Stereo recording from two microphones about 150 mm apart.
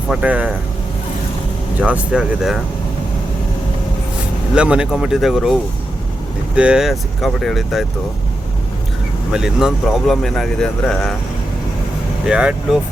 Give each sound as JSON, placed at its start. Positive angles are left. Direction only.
{"t": 0.1, "sound": "speech", "side_deg": -10}
{"t": 1.8, "sound": "speech", "side_deg": -5}
{"t": 4.5, "sound": "speech", "side_deg": -5}
{"t": 6.6, "sound": "speech", "side_deg": -5}
{"t": 9.3, "sound": "speech", "side_deg": -5}
{"t": 12.2, "sound": "speech", "side_deg": -5}